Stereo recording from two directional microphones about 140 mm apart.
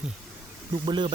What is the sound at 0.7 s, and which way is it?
Speech, 35° right (ahead or behind).